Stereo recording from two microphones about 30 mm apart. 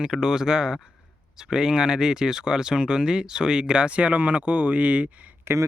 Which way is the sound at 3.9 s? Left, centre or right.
Right.